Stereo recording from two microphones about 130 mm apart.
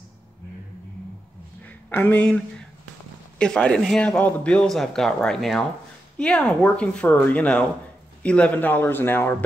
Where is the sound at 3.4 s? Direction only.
5° left (ahead or behind).